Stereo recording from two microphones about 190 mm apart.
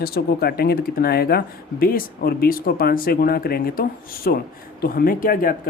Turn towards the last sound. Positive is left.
turn(degrees=50)  # may be behind; listen again after turning